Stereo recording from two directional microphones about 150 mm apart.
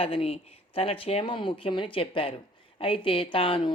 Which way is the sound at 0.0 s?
40° left (ahead or behind).